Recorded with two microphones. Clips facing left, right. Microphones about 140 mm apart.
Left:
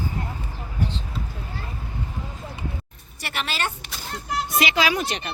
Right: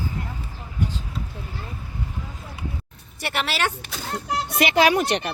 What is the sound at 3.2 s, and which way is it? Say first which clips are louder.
Speech: right 3 dB; 60° right (ahead or behind).